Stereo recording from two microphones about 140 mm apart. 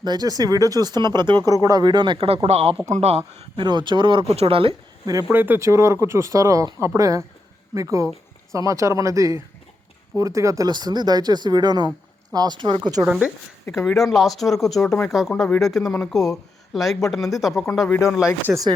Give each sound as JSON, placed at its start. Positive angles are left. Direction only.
{"t": 0.0, "sound": "speech", "side_deg": -30}
{"t": 3.6, "sound": "speech", "side_deg": -35}
{"t": 5.3, "sound": "speech", "side_deg": -15}
{"t": 13.1, "sound": "speech", "side_deg": -10}
{"t": 18.4, "sound": "speech", "side_deg": -20}